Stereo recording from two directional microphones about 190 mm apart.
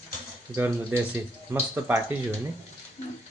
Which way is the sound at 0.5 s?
10° right (ahead or behind).